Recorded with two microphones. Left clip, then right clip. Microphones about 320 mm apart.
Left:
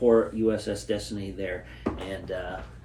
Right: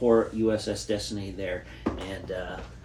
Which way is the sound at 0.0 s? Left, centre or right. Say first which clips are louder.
Left 1 dB; centre.